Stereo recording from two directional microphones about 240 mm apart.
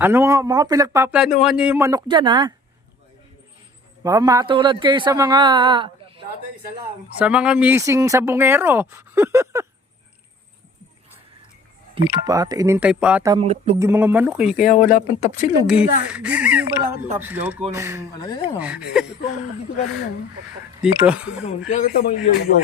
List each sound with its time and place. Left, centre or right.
0.0 s speech: centre
4.0 s a man's voice: centre
7.2 s speech: centre
12.0 s speech: centre
13.3 s a man's voice: right
13.7 s speech: centre
14.7 s speech: left
15.6 s speech: centre
18.3 s speech: left
18.9 s speech: centre
20.8 s speech: centre
21.7 s speech: left